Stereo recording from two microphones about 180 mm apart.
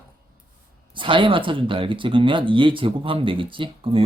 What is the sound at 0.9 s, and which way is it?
Speech, 30° right (ahead or behind).